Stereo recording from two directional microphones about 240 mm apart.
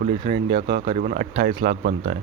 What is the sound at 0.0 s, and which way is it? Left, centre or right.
Speech, right.